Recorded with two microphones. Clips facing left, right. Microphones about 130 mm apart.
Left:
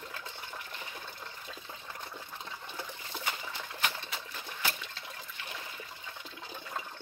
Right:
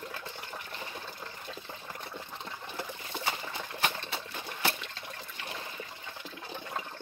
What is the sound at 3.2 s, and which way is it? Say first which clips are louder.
Trickle: right 3 dB; 30° right (ahead or behind).